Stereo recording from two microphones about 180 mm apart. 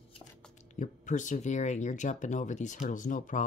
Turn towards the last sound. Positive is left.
turn(degrees=45)  # may be behind; listen again after turning